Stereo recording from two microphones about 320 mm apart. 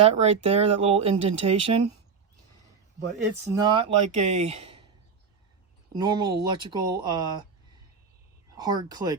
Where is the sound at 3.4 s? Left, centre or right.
Centre.